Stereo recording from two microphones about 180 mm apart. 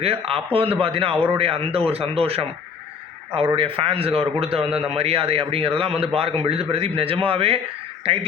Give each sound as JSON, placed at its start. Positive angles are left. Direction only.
{"t": 0.0, "sound": "a man's voice", "side_deg": -30}